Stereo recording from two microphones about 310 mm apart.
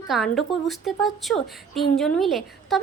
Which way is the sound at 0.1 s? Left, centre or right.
Centre.